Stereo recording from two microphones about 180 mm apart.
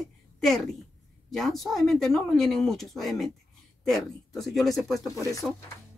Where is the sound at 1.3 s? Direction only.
Centre (ahead or behind).